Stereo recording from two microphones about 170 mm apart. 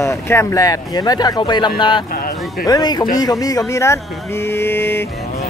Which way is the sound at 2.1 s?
55° left (ahead or behind).